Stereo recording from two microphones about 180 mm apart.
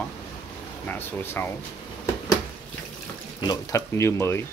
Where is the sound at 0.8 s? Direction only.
10° left (ahead or behind).